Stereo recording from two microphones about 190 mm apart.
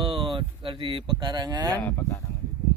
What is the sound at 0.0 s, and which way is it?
Cattle, 25° right (ahead or behind).